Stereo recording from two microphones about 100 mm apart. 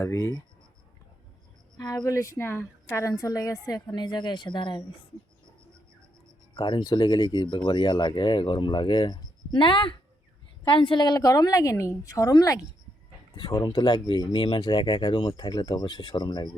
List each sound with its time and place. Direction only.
0.0 s speech: 25° left (ahead or behind)
1.7 s a woman's voice: 40° left (ahead or behind)
6.5 s a woman's voice: 45° left (ahead or behind)